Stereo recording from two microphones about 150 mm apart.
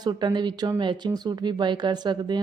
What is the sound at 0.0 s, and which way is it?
Speech, 30° right (ahead or behind).